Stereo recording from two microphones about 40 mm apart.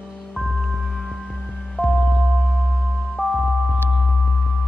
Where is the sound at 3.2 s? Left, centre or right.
Right.